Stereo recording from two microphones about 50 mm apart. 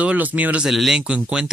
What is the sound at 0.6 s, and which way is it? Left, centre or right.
Speech, centre.